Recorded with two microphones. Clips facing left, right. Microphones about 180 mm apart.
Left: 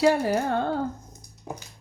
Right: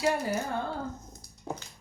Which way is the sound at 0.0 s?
65° left (ahead or behind).